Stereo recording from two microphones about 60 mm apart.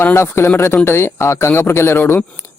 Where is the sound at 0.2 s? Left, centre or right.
Left.